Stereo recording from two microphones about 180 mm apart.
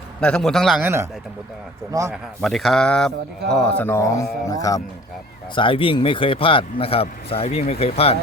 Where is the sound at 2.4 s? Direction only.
Centre (ahead or behind); by 8.1 s 35° left (ahead or behind).